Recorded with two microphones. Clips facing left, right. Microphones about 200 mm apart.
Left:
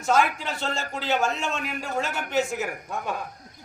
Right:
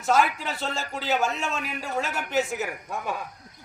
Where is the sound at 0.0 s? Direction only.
Centre (ahead or behind).